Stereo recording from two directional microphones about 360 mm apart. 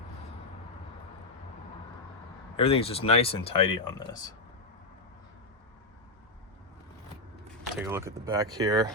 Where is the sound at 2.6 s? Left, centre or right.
Centre.